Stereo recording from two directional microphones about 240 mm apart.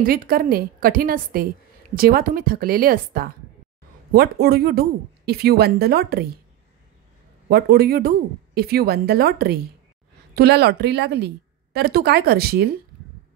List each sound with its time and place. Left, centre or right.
0.0 s a woman's voice: right
7.4 s a woman's voice: right